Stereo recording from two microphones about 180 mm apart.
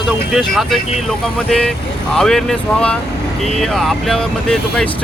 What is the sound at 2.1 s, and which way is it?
Speech, centre (ahead or behind).